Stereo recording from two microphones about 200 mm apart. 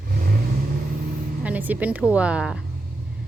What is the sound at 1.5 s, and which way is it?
A woman's voice, 10° right (ahead or behind).